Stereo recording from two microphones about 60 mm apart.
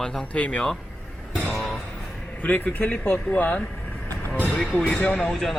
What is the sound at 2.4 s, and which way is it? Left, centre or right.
A man's voice, left.